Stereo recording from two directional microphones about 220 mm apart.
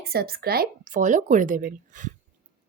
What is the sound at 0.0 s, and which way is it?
A woman's voice, 45° right (ahead or behind).